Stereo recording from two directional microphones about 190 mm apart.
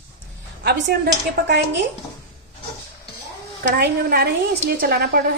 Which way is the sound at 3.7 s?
55° right (ahead or behind).